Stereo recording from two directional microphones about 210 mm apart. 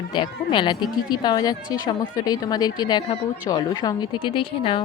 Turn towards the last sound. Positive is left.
turn(degrees=25)  # may be behind; listen again after turning